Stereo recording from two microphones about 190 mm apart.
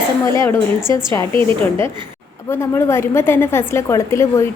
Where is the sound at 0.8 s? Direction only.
15° left (ahead or behind).